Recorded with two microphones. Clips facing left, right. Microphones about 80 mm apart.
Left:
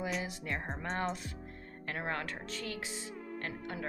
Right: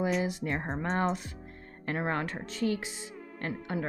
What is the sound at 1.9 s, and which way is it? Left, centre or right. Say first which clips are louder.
Speech: right 6 dB; right.